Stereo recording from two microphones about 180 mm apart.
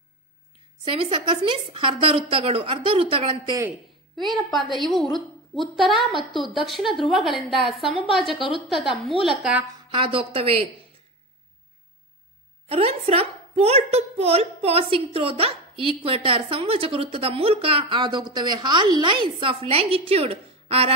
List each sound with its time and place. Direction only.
0.8 s a woman's voice: 30° right (ahead or behind)
4.2 s a woman's voice: centre (ahead or behind)
9.8 s a woman's voice: 30° right (ahead or behind)
12.6 s a woman's voice: 35° right (ahead or behind)